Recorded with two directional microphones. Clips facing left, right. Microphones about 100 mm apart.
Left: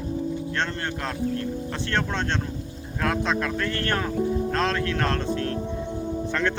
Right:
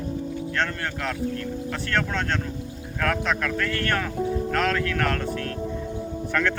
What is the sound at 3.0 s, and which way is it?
Speech, 20° left (ahead or behind).